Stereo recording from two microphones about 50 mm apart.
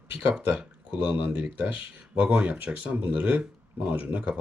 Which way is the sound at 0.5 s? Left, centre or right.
Right.